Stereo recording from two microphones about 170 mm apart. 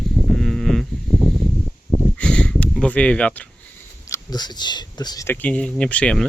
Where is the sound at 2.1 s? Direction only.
5° left (ahead or behind).